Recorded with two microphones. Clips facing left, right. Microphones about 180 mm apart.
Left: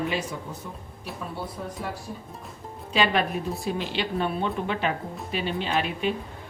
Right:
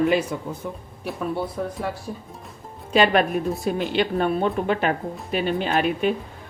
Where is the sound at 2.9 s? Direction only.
50° right (ahead or behind).